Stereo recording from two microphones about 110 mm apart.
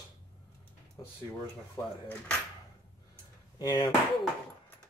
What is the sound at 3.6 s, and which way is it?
Speech, 45° left (ahead or behind).